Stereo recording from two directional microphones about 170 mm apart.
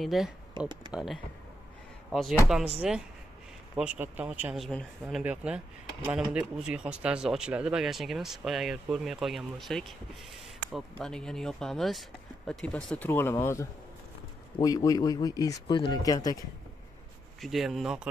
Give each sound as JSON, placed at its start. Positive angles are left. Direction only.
{"t": 0.0, "sound": "speech", "side_deg": 0}
{"t": 17.4, "sound": "speech", "side_deg": 0}